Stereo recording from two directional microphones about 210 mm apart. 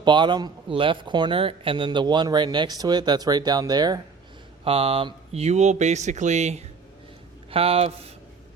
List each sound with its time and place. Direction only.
0.0 s speech: 20° right (ahead or behind)